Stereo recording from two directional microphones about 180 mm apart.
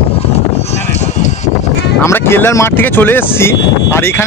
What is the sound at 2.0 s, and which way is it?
Speech, 15° left (ahead or behind).